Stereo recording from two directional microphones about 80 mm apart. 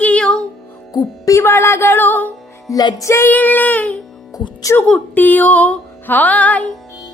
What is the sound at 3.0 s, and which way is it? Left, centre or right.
Music, left.